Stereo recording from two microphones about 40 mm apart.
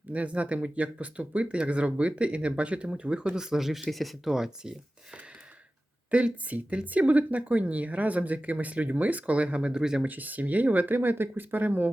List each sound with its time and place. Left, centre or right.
0.1 s speech: right
3.3 s speech: centre
3.8 s speech: centre
6.1 s speech: right
10.0 s speech: right
10.9 s speech: right